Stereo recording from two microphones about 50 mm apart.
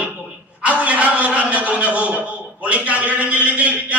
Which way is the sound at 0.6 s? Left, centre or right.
Right.